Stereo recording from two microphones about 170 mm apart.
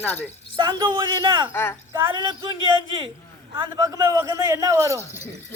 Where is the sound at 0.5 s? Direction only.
25° right (ahead or behind).